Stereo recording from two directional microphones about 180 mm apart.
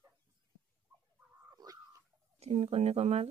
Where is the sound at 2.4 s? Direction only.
35° right (ahead or behind).